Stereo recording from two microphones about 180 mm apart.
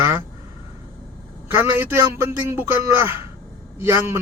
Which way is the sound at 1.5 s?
15° right (ahead or behind).